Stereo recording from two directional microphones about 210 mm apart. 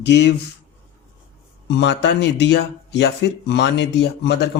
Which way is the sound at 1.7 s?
55° left (ahead or behind).